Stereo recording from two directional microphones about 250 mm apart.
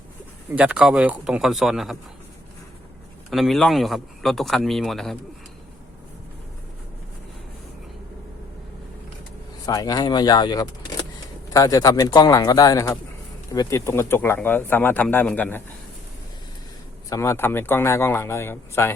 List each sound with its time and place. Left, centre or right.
0.5 s speech: centre
3.2 s speech: centre
9.6 s speech: centre
17.1 s speech: centre